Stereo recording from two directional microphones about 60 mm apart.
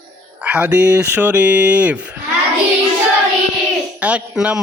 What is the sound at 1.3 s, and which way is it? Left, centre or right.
Speech, right.